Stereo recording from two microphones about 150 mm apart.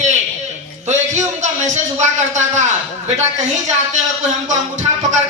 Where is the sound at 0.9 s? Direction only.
50° right (ahead or behind).